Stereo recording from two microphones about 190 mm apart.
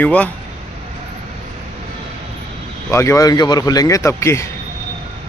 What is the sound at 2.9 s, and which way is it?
Speech, 15° left (ahead or behind).